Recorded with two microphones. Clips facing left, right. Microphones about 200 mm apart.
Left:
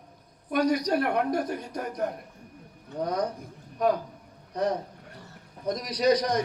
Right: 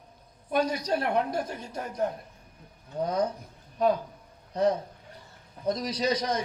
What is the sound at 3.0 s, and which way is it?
Speech, 25° right (ahead or behind).